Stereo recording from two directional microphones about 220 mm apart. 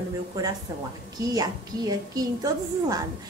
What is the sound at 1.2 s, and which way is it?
A woman's voice, 15° right (ahead or behind).